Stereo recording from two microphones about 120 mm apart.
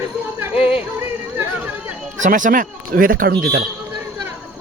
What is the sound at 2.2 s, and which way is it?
Speech, 90° right.